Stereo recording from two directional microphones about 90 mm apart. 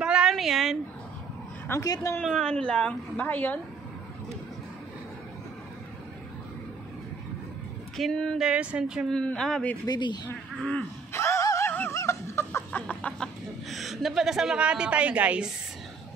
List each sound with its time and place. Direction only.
0.0 s a sound: 10° right (ahead or behind)
1.7 s a woman's voice: 35° left (ahead or behind)
2.2 s a woman's voice: 10° left (ahead or behind)
7.9 s a woman's voice: 5° left (ahead or behind)
8.4 s speech: 10° right (ahead or behind)
9.1 s a woman's voice: 10° left (ahead or behind)
9.8 s speech: 55° left (ahead or behind)
10.6 s a woman's voice: 10° left (ahead or behind)
11.1 s a sound: 30° left (ahead or behind)
11.6 s music: 20° left (ahead or behind)
11.9 s chicken: 35° left (ahead or behind)
12.8 s a sound: 10° left (ahead or behind)
13.7 s a woman's voice: centre (ahead or behind)